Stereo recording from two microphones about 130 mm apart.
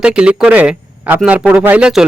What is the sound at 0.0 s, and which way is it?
Speech, 5° right (ahead or behind).